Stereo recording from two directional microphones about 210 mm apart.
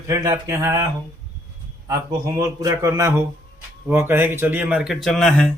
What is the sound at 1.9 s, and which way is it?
Speech, 15° right (ahead or behind).